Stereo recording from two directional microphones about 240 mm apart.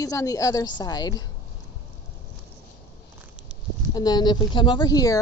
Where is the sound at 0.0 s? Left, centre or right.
Centre.